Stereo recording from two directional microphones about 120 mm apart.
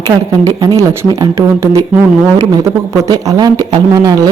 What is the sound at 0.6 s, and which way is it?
Speech, 35° right (ahead or behind).